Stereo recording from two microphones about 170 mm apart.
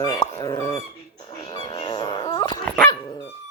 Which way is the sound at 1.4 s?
30° left (ahead or behind).